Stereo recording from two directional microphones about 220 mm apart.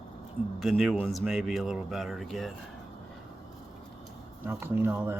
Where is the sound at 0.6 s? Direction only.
Centre (ahead or behind).